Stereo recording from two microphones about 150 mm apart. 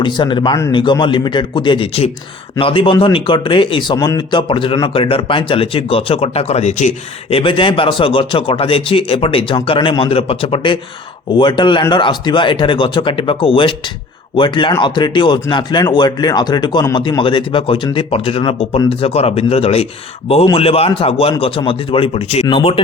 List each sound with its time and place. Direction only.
0.0 s speech: 30° left (ahead or behind)